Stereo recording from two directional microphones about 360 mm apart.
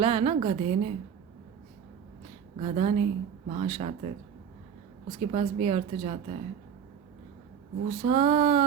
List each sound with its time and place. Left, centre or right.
0.0 s a woman's voice: centre
2.6 s a woman's voice: centre
5.2 s a woman's voice: centre
7.9 s a woman's voice: centre